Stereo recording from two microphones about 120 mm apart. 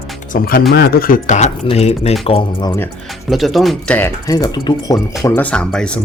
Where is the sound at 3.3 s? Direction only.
Centre (ahead or behind).